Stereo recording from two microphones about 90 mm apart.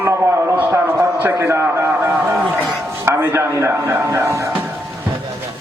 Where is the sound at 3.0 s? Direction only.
25° right (ahead or behind).